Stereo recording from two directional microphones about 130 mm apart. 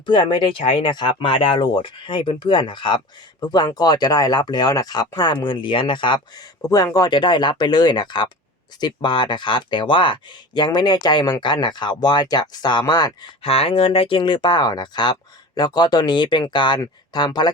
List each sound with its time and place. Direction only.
0.0 s speech: 40° left (ahead or behind)
13.4 s speech: 45° left (ahead or behind)